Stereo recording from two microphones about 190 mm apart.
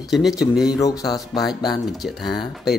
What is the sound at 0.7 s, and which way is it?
Speech, 20° left (ahead or behind).